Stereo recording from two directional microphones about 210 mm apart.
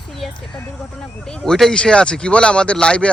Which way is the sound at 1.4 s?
Centre (ahead or behind).